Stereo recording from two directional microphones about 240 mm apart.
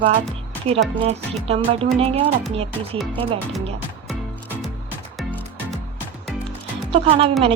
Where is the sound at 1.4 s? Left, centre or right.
Right.